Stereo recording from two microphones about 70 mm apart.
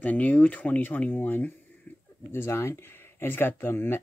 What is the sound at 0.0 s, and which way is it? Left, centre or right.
Speech, left.